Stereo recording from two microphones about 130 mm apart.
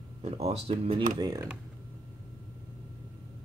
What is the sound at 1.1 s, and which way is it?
Speech, 30° right (ahead or behind).